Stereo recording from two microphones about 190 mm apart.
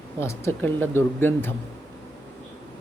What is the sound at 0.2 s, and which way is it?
Speech, 15° left (ahead or behind).